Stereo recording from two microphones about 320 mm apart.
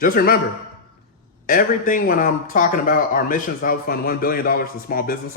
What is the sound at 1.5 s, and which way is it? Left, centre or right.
A man's voice, left.